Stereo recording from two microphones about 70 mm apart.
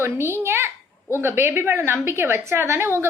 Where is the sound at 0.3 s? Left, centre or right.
Right.